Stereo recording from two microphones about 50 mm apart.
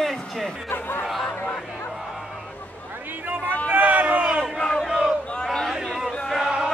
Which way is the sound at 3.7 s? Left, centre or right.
Right.